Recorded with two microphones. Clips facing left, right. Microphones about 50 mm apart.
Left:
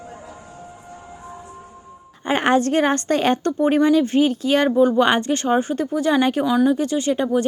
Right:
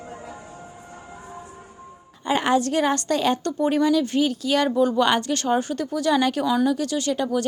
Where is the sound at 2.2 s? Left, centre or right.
Left.